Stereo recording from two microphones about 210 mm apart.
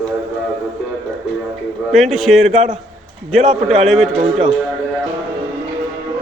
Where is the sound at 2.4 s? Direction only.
30° right (ahead or behind).